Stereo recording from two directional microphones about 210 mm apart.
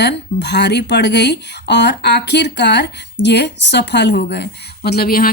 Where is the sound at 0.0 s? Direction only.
55° left (ahead or behind).